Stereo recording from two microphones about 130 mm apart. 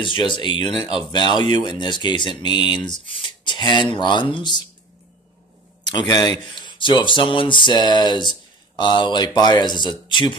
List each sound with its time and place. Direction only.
0.0 s speech: 40° left (ahead or behind)
5.9 s speech: 35° left (ahead or behind)